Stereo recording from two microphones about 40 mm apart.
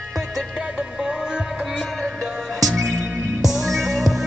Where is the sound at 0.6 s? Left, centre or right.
Centre.